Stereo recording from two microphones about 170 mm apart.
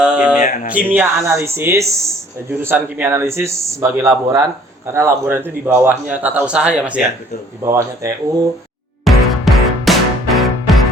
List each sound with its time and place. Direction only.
0.0 s a sound: 5° right (ahead or behind)
0.4 s speech: 45° left (ahead or behind)
0.7 s a man's voice: 10° right (ahead or behind)
7.6 s a man's voice: 15° right (ahead or behind)
9.0 s music: centre (ahead or behind)